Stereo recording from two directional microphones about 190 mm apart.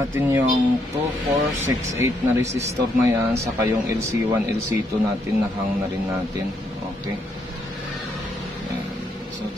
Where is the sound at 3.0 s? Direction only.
15° right (ahead or behind).